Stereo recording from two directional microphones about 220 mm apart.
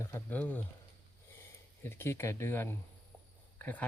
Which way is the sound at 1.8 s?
10° left (ahead or behind).